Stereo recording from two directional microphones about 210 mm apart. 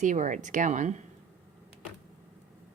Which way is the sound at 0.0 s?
35° right (ahead or behind).